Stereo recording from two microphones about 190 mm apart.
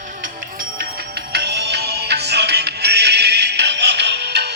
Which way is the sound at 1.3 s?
60° right (ahead or behind).